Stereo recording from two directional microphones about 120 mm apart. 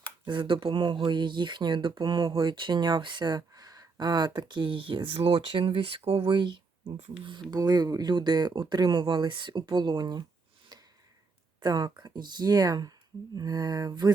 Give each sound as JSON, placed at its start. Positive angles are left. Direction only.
{"t": 0.3, "sound": "speech", "side_deg": -40}
{"t": 10.7, "sound": "a sound", "side_deg": -35}
{"t": 11.6, "sound": "speech", "side_deg": -35}